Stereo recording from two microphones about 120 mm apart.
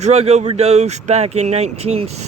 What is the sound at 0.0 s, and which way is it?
Speech, 65° right (ahead or behind).